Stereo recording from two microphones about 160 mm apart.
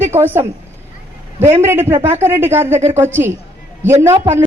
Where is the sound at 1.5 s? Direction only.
15° right (ahead or behind).